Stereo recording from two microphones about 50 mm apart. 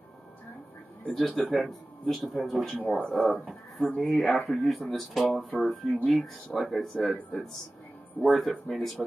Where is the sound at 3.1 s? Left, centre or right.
Centre.